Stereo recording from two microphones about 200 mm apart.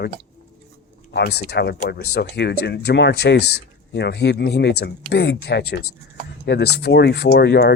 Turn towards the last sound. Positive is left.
turn(degrees=55)  # may be behind; listen again after turning